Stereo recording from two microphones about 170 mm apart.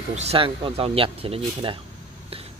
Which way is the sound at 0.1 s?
40° right (ahead or behind).